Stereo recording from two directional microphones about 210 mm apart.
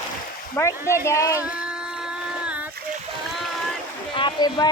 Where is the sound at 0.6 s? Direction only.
10° left (ahead or behind).